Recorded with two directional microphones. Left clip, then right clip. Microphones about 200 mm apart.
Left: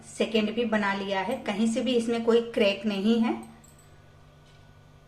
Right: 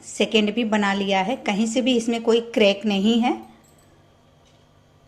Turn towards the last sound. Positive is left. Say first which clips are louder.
# right 6 dB
turn(degrees=-35)  # may be behind; listen again after turning